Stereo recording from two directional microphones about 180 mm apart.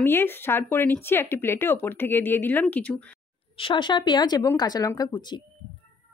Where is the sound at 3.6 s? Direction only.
25° left (ahead or behind).